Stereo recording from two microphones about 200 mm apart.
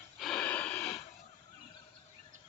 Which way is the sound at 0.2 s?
5° left (ahead or behind).